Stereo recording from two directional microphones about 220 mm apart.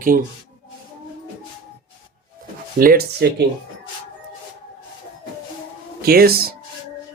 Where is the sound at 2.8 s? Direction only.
40° right (ahead or behind).